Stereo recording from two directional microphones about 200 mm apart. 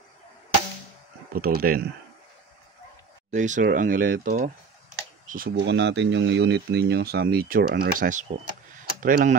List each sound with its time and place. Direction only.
1.3 s speech: 50° right (ahead or behind)
3.3 s speech: 35° right (ahead or behind)